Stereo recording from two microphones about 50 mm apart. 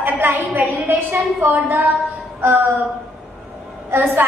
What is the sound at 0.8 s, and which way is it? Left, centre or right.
A woman's voice, right.